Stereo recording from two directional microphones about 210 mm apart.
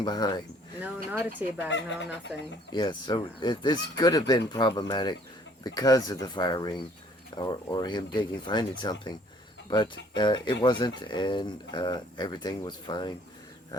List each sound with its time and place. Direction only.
0.0 s speech: 20° left (ahead or behind)
0.8 s speech: 10° right (ahead or behind)
2.7 s speech: 20° left (ahead or behind)